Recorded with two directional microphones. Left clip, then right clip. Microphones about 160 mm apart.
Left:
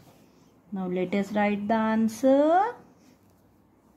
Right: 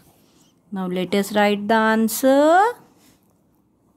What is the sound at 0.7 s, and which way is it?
Speech, 45° right (ahead or behind).